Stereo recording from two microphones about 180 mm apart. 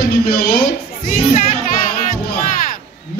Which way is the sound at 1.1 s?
45° left (ahead or behind).